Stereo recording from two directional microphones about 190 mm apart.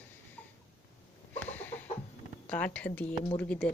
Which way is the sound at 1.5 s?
10° left (ahead or behind).